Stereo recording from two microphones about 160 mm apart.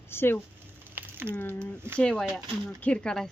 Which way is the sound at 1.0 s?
15° right (ahead or behind).